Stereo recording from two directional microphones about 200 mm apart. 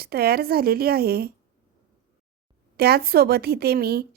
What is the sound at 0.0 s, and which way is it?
A woman's voice, 50° right (ahead or behind).